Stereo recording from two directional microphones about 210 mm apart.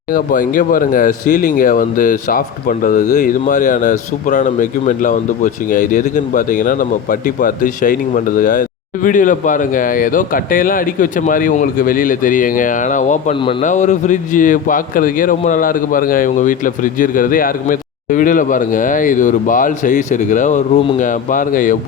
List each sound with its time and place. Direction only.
0.1 s speech: 40° left (ahead or behind)